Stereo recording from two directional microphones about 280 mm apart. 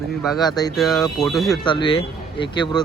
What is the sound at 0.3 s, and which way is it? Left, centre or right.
Speech, centre.